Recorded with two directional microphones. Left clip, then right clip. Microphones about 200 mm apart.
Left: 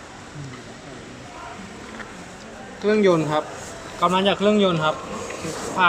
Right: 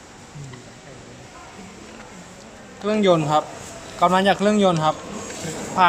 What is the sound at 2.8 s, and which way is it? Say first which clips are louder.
A man's voice: even; 30° right (ahead or behind).